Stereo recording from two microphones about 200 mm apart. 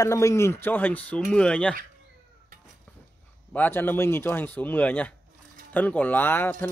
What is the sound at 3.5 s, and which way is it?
Speech, 10° left (ahead or behind).